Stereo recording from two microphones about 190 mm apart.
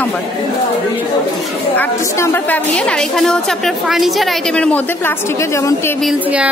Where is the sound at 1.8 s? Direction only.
15° left (ahead or behind).